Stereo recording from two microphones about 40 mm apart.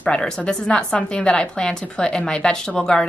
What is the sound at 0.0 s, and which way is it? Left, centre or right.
A woman's voice, left.